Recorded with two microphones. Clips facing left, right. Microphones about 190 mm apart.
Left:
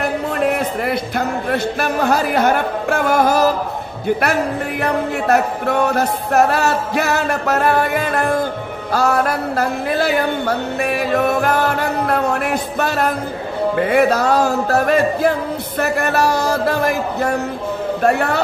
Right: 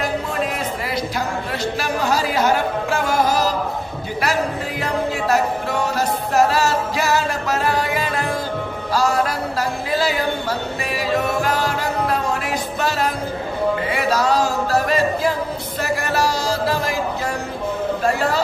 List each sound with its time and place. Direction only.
0.0 s speech: 60° left (ahead or behind)
4.2 s music: 60° left (ahead or behind)